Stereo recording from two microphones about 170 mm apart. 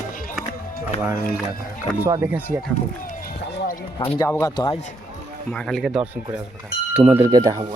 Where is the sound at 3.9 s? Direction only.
20° left (ahead or behind).